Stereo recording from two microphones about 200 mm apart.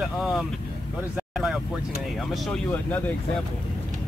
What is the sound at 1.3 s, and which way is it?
Vehicle, centre (ahead or behind).